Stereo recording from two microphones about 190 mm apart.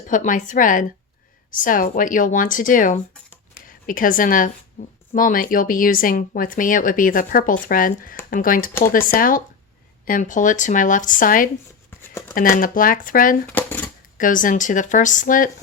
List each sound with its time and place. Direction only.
0.1 s a woman's voice: 40° left (ahead or behind)
13.5 s a sound: 10° left (ahead or behind)
14.2 s speech: 45° left (ahead or behind)